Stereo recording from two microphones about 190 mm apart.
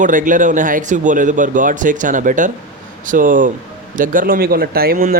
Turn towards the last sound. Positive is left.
turn(degrees=-50)  # may be behind; listen again after turning